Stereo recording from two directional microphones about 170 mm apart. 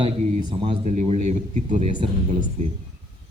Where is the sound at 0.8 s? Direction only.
45° right (ahead or behind).